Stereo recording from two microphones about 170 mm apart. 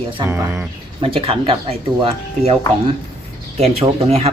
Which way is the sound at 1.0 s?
35° right (ahead or behind).